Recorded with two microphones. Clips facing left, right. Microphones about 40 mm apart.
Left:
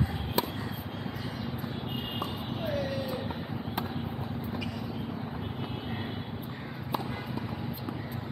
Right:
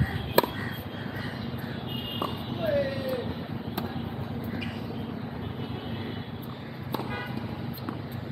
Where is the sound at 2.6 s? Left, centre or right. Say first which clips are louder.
Right 6 dB; centre.